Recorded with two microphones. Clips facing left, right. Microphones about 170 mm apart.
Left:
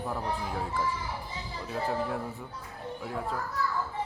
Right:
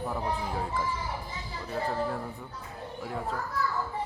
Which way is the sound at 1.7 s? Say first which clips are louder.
Even; 5° left (ahead or behind).